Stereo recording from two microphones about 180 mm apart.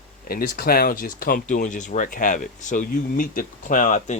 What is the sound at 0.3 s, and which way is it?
Speech, 55° left (ahead or behind).